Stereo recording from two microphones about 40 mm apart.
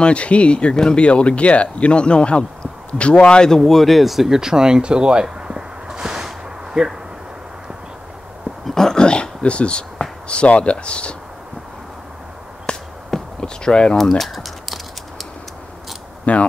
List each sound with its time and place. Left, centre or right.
0.0 s speech: left
3.4 s speech: centre; by 5.2 s right
5.2 s a sound: centre
8.6 s dog: centre
9.0 s speech: left
12.7 s a sound: left
13.4 s speech: left
13.9 s typing: centre
16.3 s speech: left